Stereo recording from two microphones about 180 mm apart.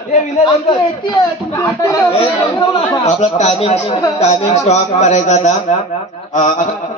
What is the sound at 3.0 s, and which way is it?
A man's voice, 40° left (ahead or behind).